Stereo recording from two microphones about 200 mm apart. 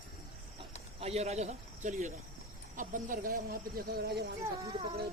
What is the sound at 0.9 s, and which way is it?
Speech, 30° right (ahead or behind).